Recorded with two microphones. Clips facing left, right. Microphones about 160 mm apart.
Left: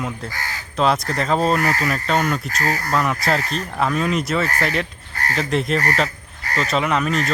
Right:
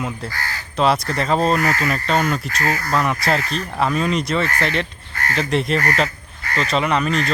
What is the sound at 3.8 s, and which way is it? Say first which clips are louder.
Speech: right 1 dB; centre (ahead or behind).